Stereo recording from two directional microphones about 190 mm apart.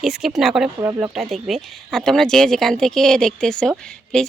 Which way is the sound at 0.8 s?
15° right (ahead or behind).